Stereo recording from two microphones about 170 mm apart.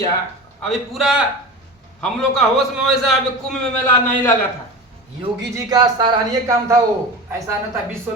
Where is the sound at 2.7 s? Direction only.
Centre (ahead or behind).